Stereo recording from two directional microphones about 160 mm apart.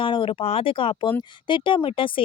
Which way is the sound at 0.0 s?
30° left (ahead or behind).